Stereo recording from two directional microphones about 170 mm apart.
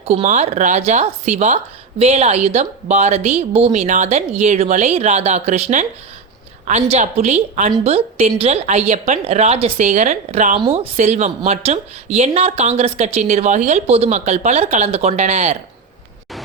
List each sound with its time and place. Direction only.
0.0 s a woman's voice: 40° right (ahead or behind)